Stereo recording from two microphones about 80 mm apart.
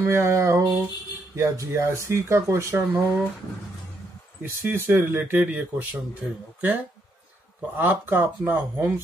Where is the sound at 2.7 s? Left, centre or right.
Right.